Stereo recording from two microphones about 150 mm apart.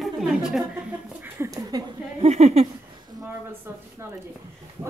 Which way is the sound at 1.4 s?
25° right (ahead or behind).